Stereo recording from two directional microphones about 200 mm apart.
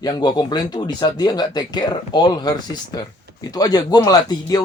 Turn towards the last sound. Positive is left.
turn(degrees=20)  # may be behind; listen again after turning